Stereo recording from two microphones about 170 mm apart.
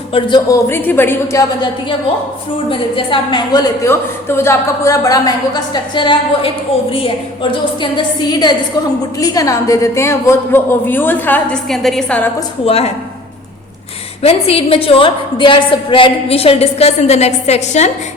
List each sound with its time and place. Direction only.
0.1 s a woman's voice: 25° left (ahead or behind)
2.6 s a woman's voice: 30° left (ahead or behind)
7.8 s a woman's voice: 25° left (ahead or behind); by 12.3 s 5° left (ahead or behind)
12.6 s a woman's voice: 35° left (ahead or behind)
14.2 s a woman's voice: 35° left (ahead or behind)